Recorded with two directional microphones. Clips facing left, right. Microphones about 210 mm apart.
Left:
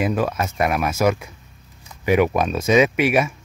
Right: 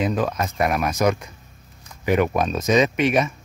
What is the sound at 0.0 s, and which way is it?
Speech, 5° left (ahead or behind).